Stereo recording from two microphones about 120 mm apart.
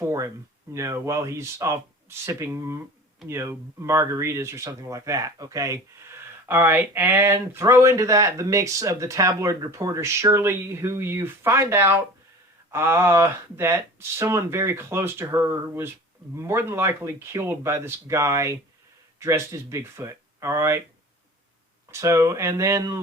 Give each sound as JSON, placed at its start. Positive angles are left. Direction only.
{"t": 0.0, "sound": "speech", "side_deg": -25}
{"t": 21.8, "sound": "speech", "side_deg": -25}